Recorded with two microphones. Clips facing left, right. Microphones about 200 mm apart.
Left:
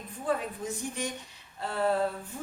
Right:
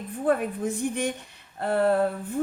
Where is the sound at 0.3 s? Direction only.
55° right (ahead or behind).